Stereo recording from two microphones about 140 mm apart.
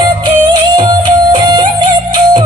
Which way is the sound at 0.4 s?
35° right (ahead or behind).